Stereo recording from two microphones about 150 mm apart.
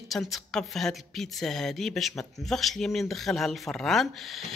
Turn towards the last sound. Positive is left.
turn(degrees=0)  # may be behind; listen again after turning